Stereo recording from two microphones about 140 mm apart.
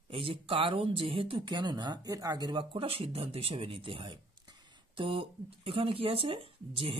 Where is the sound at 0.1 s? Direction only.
40° right (ahead or behind).